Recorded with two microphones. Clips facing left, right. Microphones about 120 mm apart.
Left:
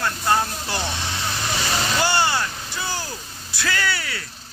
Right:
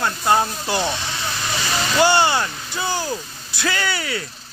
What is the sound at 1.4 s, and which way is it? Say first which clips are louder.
Vehicle: even; 20° left (ahead or behind).